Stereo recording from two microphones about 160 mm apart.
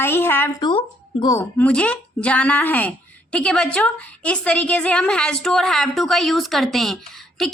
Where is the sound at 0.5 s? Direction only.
30° left (ahead or behind).